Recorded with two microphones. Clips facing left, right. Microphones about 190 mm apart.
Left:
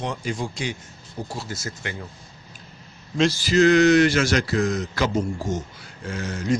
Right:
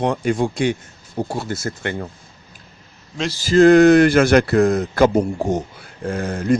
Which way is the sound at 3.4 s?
50° right (ahead or behind).